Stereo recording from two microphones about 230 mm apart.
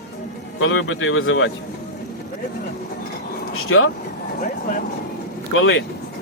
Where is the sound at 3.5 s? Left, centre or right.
Left.